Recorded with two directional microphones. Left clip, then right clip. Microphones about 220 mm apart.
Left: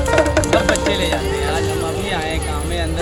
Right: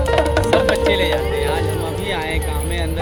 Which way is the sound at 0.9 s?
40° right (ahead or behind).